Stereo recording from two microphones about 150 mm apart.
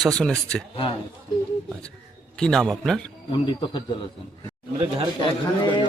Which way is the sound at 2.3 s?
5° left (ahead or behind).